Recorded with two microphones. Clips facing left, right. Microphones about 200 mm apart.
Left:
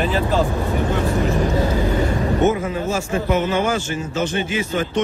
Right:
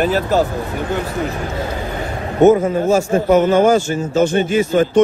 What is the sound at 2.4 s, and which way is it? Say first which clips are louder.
A man's voice: right 11 dB; 45° right (ahead or behind).